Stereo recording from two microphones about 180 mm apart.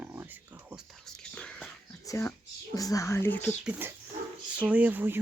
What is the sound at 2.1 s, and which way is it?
Speech, 15° left (ahead or behind).